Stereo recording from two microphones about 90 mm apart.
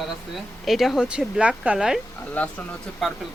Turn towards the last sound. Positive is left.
turn(degrees=0)  # may be behind; listen again after turning